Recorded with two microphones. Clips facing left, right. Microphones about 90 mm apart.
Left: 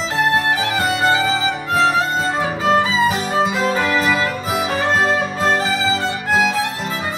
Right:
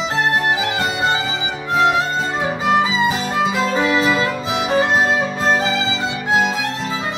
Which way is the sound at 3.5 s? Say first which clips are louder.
Right 1 dB; centre (ahead or behind).